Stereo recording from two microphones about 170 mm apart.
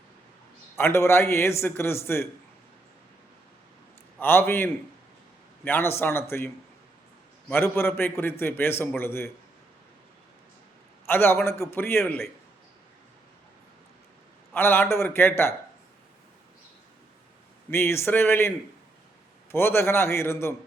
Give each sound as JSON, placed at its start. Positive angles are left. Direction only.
{"t": 0.8, "sound": "a man's voice", "side_deg": 15}
{"t": 4.2, "sound": "a man's voice", "side_deg": 10}
{"t": 7.4, "sound": "a man's voice", "side_deg": 15}
{"t": 11.0, "sound": "a man's voice", "side_deg": 15}
{"t": 14.5, "sound": "a man's voice", "side_deg": 10}
{"t": 17.7, "sound": "a man's voice", "side_deg": 15}